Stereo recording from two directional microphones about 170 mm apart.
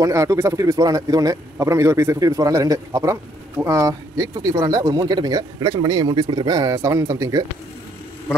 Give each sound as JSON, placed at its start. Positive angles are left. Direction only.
{"t": 0.0, "sound": "a man's voice", "side_deg": -20}